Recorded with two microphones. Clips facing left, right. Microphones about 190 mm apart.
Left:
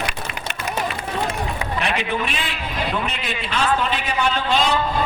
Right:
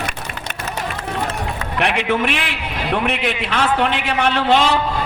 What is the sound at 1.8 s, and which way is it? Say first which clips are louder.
A man's voice: right 6 dB; 75° right (ahead or behind).